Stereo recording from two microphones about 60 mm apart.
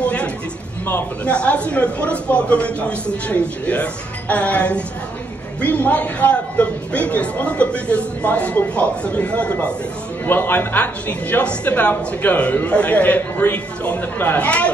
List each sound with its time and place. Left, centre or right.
0.0 s a sound: left
1.2 s a woman's voice: left
10.2 s a woman's voice: left